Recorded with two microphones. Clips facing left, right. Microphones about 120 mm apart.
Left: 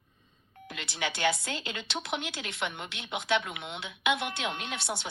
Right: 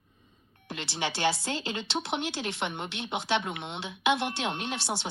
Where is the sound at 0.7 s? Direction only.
30° right (ahead or behind).